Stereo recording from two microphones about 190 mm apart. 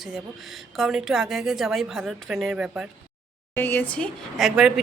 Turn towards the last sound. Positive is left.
turn(degrees=0)  # may be behind; listen again after turning